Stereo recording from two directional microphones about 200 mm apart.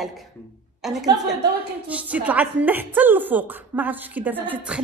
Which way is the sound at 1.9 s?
5° right (ahead or behind).